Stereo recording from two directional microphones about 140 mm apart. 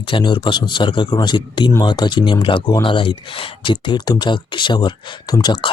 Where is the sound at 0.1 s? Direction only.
35° left (ahead or behind).